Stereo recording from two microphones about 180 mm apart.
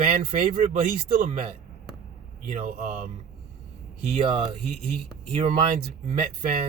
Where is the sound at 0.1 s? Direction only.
35° right (ahead or behind).